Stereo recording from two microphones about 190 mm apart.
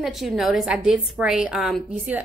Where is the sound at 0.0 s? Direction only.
Centre (ahead or behind).